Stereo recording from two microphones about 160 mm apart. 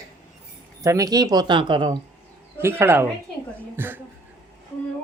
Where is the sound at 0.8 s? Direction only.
20° right (ahead or behind).